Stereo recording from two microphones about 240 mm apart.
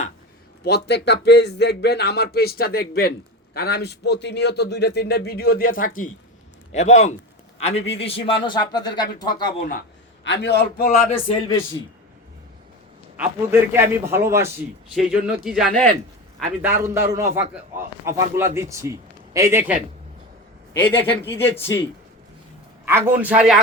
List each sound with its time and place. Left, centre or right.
0.9 s a man's voice: left; by 9.3 s centre
9.4 s speech: left
10.2 s a man's voice: left
11.1 s speech: centre
13.1 s a man's voice: centre
20.7 s speech: centre
22.9 s a man's voice: centre